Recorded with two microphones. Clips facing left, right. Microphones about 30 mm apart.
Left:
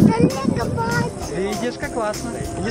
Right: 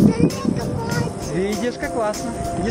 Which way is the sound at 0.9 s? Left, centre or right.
Centre.